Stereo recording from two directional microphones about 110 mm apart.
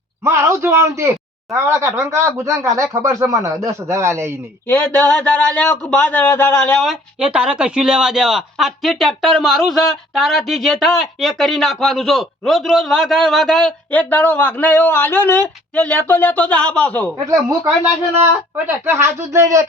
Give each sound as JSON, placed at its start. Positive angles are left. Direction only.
{"t": 0.3, "sound": "speech", "side_deg": -25}
{"t": 4.7, "sound": "a man's voice", "side_deg": 15}
{"t": 6.8, "sound": "speech", "side_deg": -10}
{"t": 18.9, "sound": "speech", "side_deg": -25}